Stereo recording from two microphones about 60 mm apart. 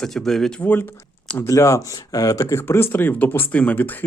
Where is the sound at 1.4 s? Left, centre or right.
Left.